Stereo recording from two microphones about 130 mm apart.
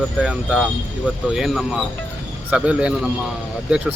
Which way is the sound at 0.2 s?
10° right (ahead or behind).